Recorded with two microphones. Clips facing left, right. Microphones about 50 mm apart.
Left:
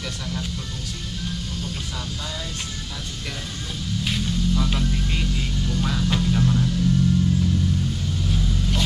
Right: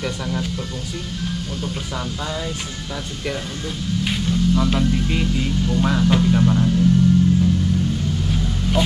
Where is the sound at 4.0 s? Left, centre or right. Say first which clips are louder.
Right 4 dB; centre.